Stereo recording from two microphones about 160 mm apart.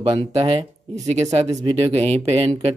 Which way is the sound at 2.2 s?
40° right (ahead or behind).